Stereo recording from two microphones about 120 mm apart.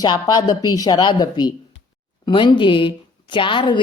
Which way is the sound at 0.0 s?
35° left (ahead or behind).